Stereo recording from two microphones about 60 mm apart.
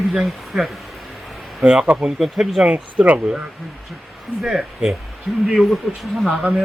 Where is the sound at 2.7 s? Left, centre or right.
Right.